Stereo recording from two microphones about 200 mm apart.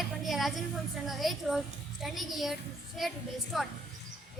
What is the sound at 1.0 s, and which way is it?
A woman's voice, centre (ahead or behind).